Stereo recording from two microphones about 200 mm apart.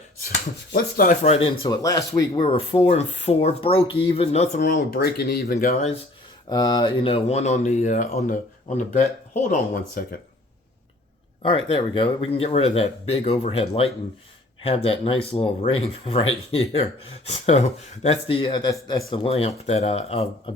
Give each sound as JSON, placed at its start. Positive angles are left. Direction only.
{"t": 0.2, "sound": "speech", "side_deg": 50}
{"t": 1.6, "sound": "speech", "side_deg": 20}
{"t": 4.6, "sound": "speech", "side_deg": 50}
{"t": 6.5, "sound": "speech", "side_deg": 20}
{"t": 9.5, "sound": "speech", "side_deg": 45}
{"t": 11.4, "sound": "speech", "side_deg": 25}